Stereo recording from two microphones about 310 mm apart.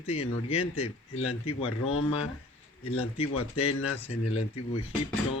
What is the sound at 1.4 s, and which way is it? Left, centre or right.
Speech, centre.